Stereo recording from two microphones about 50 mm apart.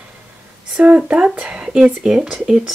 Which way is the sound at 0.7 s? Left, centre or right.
Right.